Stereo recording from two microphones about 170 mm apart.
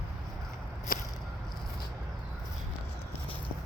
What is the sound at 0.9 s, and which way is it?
Whip, 55° left (ahead or behind).